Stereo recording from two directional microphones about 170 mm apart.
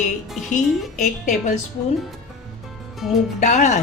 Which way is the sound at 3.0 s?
Centre (ahead or behind).